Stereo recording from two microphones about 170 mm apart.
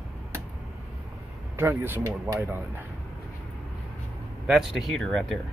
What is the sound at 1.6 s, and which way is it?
Speech, 15° right (ahead or behind).